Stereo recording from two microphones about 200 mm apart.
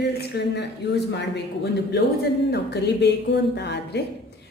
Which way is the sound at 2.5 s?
55° left (ahead or behind).